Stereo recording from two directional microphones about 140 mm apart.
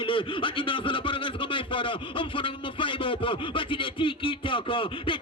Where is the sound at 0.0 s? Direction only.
40° left (ahead or behind).